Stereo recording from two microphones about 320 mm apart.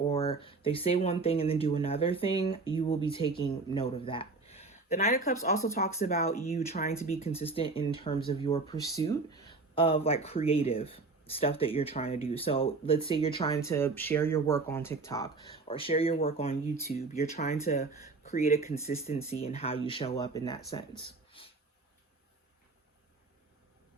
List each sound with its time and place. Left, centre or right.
0.1 s speech: centre